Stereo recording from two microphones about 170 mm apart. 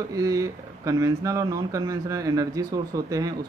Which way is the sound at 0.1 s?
20° right (ahead or behind).